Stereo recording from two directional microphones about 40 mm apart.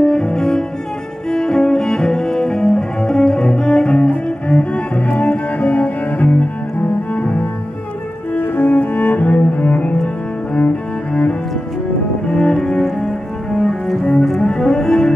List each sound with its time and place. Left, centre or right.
0.0 s cello: centre; by 6.5 s left
8.4 s cello: left
12.3 s cello: centre
13.6 s cello: centre
14.2 s double bass: centre